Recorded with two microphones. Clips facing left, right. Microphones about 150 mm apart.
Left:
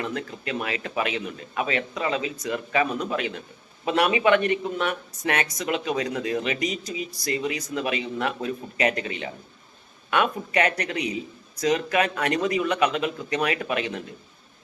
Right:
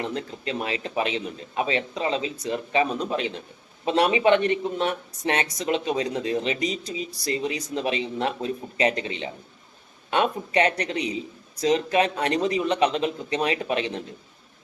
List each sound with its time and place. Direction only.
0.0 s a man's voice: 30° right (ahead or behind)